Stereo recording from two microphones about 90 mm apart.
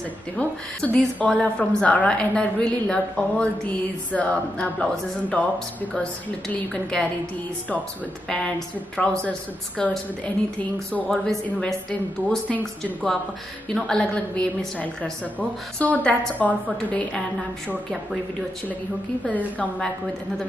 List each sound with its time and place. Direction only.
0.4 s a woman's voice: 15° left (ahead or behind)
8.3 s a woman's voice: 10° left (ahead or behind)
19.2 s a woman's voice: 15° left (ahead or behind)